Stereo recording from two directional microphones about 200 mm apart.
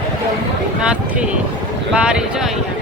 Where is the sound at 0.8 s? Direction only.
5° right (ahead or behind).